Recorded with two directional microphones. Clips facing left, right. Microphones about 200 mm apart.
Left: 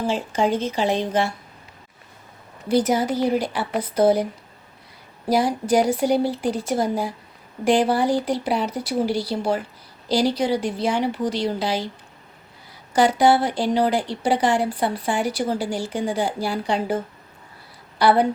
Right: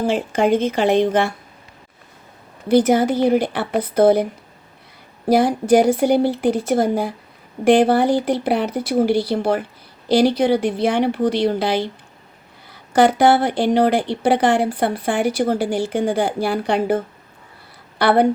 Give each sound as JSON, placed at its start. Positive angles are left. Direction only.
{"t": 0.1, "sound": "speech", "side_deg": -55}
{"t": 2.6, "sound": "speech", "side_deg": -55}
{"t": 5.3, "sound": "speech", "side_deg": -55}
{"t": 12.9, "sound": "speech", "side_deg": -55}
{"t": 18.0, "sound": "speech", "side_deg": -60}